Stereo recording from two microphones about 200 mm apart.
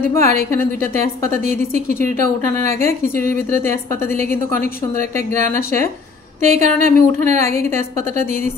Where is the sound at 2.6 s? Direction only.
40° right (ahead or behind).